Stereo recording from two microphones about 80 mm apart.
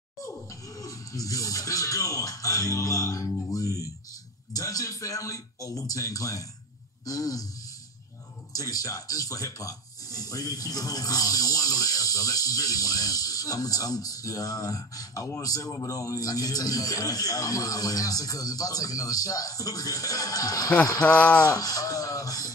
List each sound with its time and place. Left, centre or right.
0.2 s speech: left
3.4 s guitar: left
4.6 s speech: left
8.5 s speech: left
21.0 s speech: centre
21.5 s speech: left